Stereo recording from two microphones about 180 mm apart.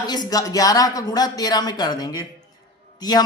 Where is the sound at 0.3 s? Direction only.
20° left (ahead or behind).